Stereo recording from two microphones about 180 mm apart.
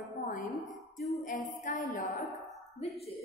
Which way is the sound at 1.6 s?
45° left (ahead or behind).